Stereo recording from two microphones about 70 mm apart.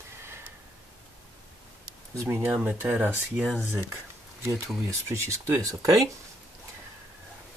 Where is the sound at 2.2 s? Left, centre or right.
Right.